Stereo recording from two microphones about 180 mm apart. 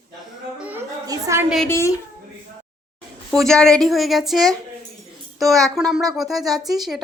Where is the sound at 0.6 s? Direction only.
10° right (ahead or behind).